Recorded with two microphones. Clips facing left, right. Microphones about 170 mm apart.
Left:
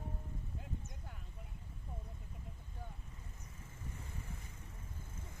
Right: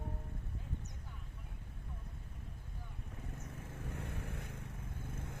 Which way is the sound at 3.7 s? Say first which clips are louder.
Right 5 dB; 65° right (ahead or behind).